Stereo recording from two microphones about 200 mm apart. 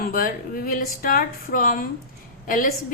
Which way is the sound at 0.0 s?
45° left (ahead or behind).